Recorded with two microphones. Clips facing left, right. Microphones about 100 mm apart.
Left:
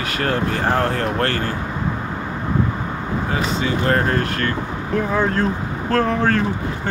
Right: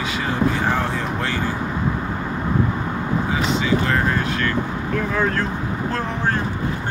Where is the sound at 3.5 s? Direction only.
45° left (ahead or behind).